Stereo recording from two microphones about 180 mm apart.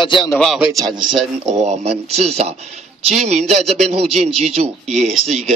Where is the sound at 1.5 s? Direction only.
40° right (ahead or behind).